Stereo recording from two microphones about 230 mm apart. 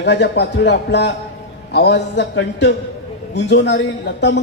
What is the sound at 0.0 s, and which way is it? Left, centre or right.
A man's voice, left.